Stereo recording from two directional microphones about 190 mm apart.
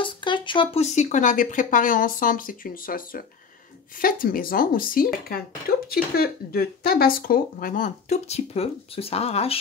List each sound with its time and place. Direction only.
0.0 s speech: 25° left (ahead or behind)